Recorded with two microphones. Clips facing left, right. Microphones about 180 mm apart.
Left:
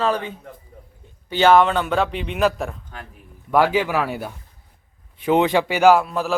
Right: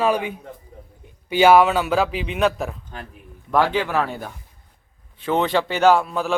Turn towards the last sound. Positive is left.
turn(degrees=0)  # may be behind; listen again after turning